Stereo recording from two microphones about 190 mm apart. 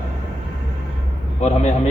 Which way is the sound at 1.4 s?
35° left (ahead or behind).